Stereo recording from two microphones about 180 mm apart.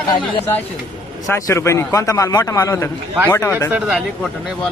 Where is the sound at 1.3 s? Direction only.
15° left (ahead or behind).